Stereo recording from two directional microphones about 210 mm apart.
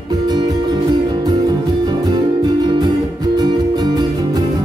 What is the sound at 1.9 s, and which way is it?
Music, 20° right (ahead or behind).